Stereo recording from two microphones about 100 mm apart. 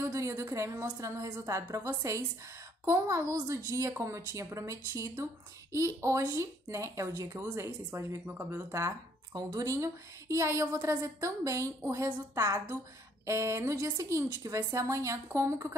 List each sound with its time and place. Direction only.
0.0 s a woman's voice: 30° right (ahead or behind)
9.3 s a woman's voice: 40° right (ahead or behind)